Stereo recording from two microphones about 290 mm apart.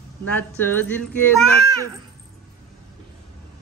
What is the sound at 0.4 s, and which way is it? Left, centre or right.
Speech, centre.